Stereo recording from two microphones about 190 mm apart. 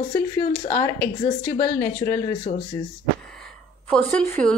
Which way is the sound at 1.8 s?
15° left (ahead or behind).